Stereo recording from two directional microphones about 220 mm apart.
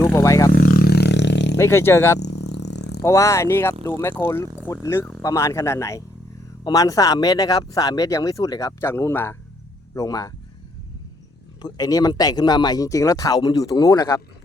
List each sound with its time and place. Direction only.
0.0 s vehicle: 10° left (ahead or behind)
0.5 s roar: 45° left (ahead or behind)
1.5 s speech: 10° left (ahead or behind)
2.1 s vehicle: 50° left (ahead or behind)
3.0 s speech: 15° left (ahead or behind)
11.6 s speech: 15° left (ahead or behind)